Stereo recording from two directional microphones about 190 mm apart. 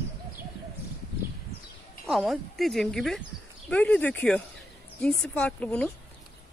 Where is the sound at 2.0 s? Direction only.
Centre (ahead or behind).